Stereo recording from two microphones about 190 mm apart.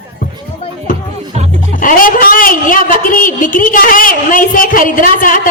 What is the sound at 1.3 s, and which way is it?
Music, 35° right (ahead or behind).